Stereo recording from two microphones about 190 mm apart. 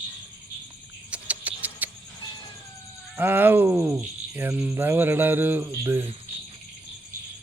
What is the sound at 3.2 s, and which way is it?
Speech, 10° right (ahead or behind).